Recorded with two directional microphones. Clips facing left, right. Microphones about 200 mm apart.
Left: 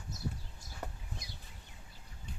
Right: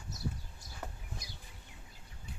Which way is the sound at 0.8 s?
Centre (ahead or behind).